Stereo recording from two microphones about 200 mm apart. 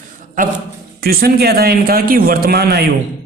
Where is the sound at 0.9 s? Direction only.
50° right (ahead or behind).